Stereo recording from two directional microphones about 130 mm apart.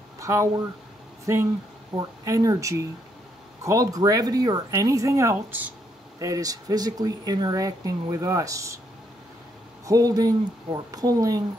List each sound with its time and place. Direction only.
0.2 s speech: 25° right (ahead or behind)
9.8 s speech: 30° right (ahead or behind)